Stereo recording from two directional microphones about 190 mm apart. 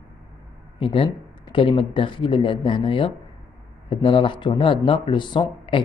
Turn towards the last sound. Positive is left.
turn(degrees=25)  # may be behind; listen again after turning